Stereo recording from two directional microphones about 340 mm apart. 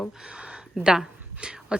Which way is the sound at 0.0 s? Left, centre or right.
Centre.